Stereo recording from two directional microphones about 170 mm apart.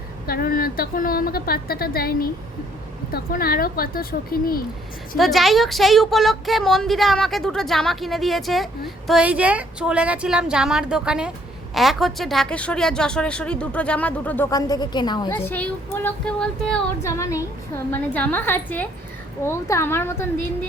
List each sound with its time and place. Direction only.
0.3 s a woman's voice: 60° left (ahead or behind)
5.1 s a woman's voice: centre (ahead or behind)
14.5 s a woman's voice: 25° left (ahead or behind)
15.4 s speech: 10° left (ahead or behind)
17.0 s speech: 15° left (ahead or behind)